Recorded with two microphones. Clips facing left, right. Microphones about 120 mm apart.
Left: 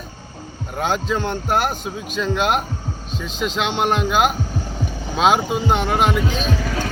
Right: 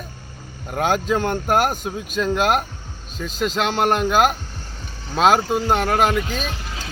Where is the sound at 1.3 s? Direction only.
45° right (ahead or behind).